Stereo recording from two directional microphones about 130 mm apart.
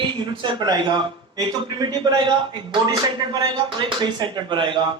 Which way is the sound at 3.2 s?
30° right (ahead or behind).